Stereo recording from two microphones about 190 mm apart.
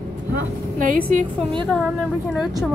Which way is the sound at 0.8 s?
45° right (ahead or behind).